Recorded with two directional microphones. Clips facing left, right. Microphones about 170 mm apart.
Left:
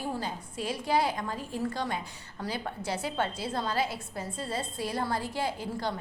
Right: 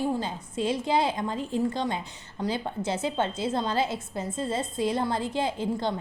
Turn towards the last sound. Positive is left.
turn(degrees=-25)  # may be behind; listen again after turning